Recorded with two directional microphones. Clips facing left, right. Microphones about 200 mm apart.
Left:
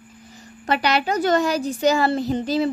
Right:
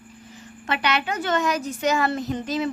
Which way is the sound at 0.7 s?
35° left (ahead or behind).